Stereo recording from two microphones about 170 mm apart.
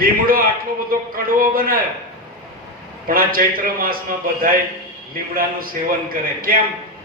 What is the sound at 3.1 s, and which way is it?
Speech, 60° right (ahead or behind).